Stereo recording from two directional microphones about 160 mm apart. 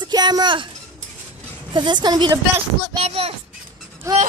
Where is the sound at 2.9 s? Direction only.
35° right (ahead or behind).